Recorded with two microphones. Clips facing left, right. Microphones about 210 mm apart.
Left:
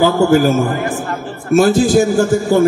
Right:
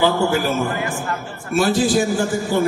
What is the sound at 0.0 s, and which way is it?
A man's voice, 45° left (ahead or behind).